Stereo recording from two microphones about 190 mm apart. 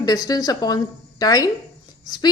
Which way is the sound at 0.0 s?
20° left (ahead or behind).